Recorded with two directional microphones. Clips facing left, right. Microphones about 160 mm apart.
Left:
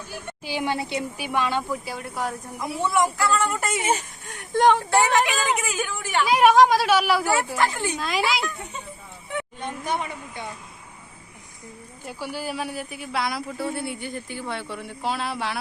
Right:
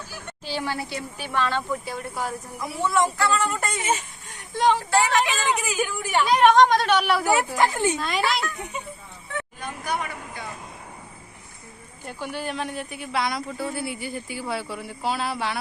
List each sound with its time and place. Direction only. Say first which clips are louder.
0.3 s speech: left 2 dB; 15° left (ahead or behind)
2.8 s speech: even; 15° left (ahead or behind)
3.2 s speech: even; centre (ahead or behind)
4.3 s speech: left 3 dB; 55° left (ahead or behind)
4.9 s speech: left 1 dB; 20° left (ahead or behind)
5.5 s speech: right 2 dB; 5° right (ahead or behind)
6.2 s speech: left 1 dB; 5° left (ahead or behind)
7.5 s speech: right 2 dB; 20° right (ahead or behind)
7.9 s speech: even; centre (ahead or behind)
9.3 s speech: left 2 dB; 20° left (ahead or behind)
12.0 s speech: even; 5° left (ahead or behind)